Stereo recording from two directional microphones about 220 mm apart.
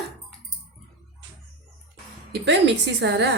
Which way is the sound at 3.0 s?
50° right (ahead or behind).